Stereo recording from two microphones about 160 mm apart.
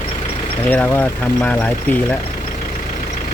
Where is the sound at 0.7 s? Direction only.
10° left (ahead or behind).